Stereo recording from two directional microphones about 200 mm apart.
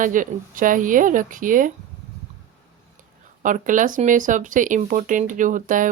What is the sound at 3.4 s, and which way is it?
Speech, 40° right (ahead or behind).